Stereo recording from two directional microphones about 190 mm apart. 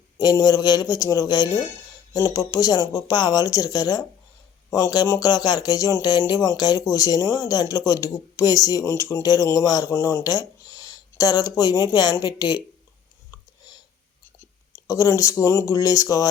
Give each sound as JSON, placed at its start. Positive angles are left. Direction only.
{"t": 0.2, "sound": "speech", "side_deg": 20}
{"t": 14.8, "sound": "speech", "side_deg": 20}